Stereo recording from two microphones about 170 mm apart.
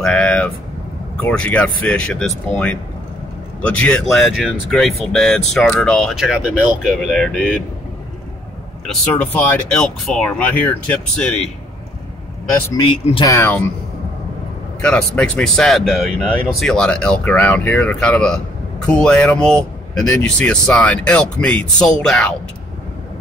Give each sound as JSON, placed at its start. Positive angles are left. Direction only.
{"t": 0.0, "sound": "vehicle", "side_deg": 5}
{"t": 1.2, "sound": "speech", "side_deg": 5}
{"t": 3.6, "sound": "speech", "side_deg": 5}
{"t": 8.8, "sound": "speech", "side_deg": 10}
{"t": 12.7, "sound": "speech", "side_deg": 25}
{"t": 13.3, "sound": "speech", "side_deg": 10}
{"t": 14.8, "sound": "speech", "side_deg": 5}